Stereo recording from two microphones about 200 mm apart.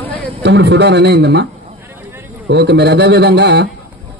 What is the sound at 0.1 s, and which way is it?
A man's voice, 60° right (ahead or behind).